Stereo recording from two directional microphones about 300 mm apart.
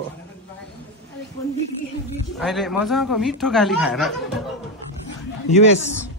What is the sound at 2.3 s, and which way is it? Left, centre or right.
Speech, centre.